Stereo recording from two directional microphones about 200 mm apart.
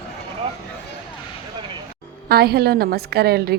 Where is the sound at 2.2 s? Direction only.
50° right (ahead or behind).